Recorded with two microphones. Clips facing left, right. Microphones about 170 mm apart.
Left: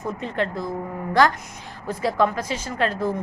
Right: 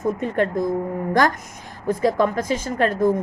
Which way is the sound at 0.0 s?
50° right (ahead or behind).